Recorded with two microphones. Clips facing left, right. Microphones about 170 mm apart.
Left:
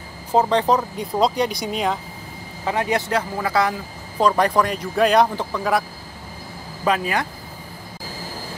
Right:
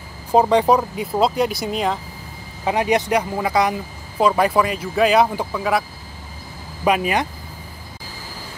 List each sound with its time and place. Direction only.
0.3 s speech: 15° right (ahead or behind)
2.6 s speech: 15° right (ahead or behind)
4.2 s speech: 5° right (ahead or behind)
6.8 s speech: 15° right (ahead or behind)